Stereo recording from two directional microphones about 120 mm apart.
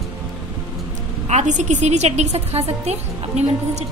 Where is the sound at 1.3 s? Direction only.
80° right.